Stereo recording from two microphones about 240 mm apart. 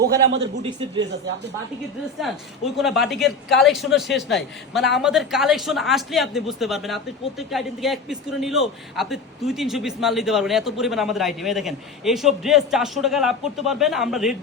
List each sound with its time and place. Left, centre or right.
0.0 s a man's voice: right
2.7 s speech: centre